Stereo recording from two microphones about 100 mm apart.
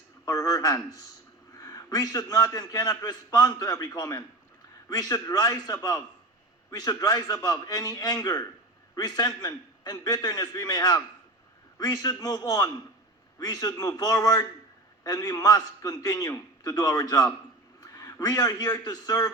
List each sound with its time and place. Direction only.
0.3 s a man's voice: 35° left (ahead or behind)
17.7 s a sound: 40° left (ahead or behind)
18.9 s a man's voice: 40° left (ahead or behind)